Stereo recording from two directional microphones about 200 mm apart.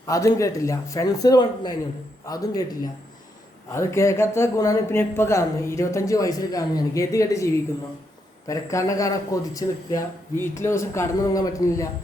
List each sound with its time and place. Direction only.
0.0 s speech: 15° left (ahead or behind)